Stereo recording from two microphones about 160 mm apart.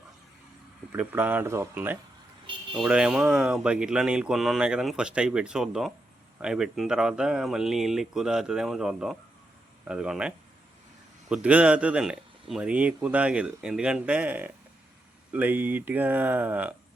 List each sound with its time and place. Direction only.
0.9 s speech: 10° right (ahead or behind)